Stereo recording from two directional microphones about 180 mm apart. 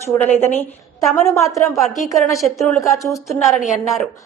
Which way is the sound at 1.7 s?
Centre (ahead or behind).